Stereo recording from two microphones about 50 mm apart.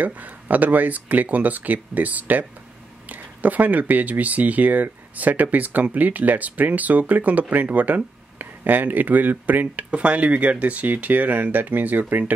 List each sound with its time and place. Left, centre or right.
0.0 s speech: right